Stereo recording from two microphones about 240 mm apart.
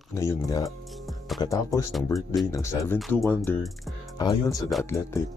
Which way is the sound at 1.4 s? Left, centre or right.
Centre.